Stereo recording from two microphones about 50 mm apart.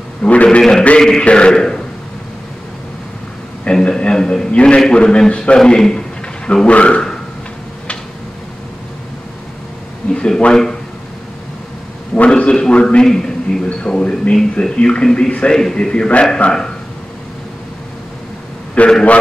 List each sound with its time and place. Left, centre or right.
0.2 s a man's voice: left
0.6 s a man's voice: centre
3.6 s a man's voice: centre
10.1 s a sound: centre
12.2 s a man's voice: left
18.8 s a man's voice: left